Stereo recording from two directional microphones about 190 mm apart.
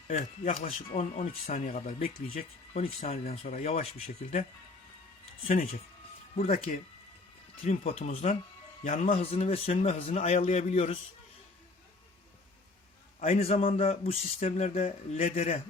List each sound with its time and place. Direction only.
0.1 s speech: 40° left (ahead or behind)
2.7 s speech: 35° left (ahead or behind)
6.3 s speech: 35° left (ahead or behind)
9.1 s speech: 30° left (ahead or behind)
13.1 s speech: 30° left (ahead or behind)